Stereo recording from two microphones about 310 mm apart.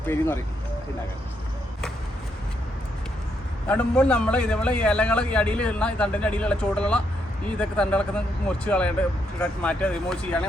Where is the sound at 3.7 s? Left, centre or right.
Centre.